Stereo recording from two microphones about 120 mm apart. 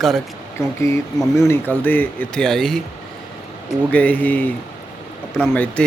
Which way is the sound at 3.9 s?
15° left (ahead or behind).